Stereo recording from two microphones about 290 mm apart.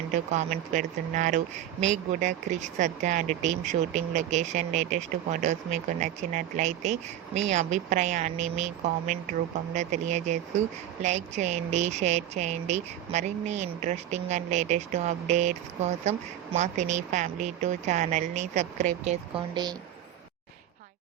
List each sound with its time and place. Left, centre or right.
0.1 s speech: right